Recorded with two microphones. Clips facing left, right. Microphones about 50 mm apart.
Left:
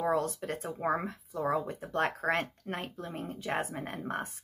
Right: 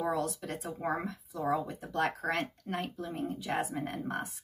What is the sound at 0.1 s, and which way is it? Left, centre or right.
Speech, left.